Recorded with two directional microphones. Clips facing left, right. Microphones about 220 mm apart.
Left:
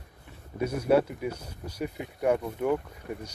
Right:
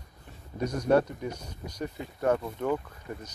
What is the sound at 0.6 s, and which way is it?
Speech, 5° left (ahead or behind).